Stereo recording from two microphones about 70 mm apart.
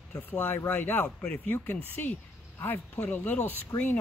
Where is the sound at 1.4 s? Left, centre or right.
Left.